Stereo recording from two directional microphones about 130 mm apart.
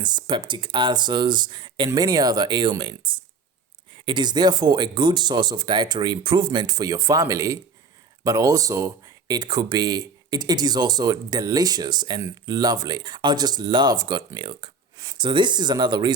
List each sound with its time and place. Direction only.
0.0 s speech: 35° right (ahead or behind)